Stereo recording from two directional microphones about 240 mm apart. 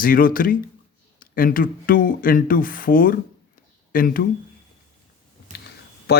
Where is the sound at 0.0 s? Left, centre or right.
Left.